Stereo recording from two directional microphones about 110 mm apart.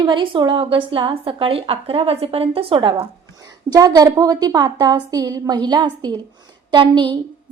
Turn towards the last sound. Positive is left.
turn(degrees=-45)  # may be behind; listen again after turning